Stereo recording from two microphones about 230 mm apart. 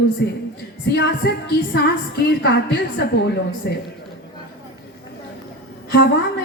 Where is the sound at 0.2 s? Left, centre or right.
Left.